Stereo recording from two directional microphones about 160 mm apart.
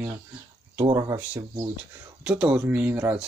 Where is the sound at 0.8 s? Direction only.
25° right (ahead or behind).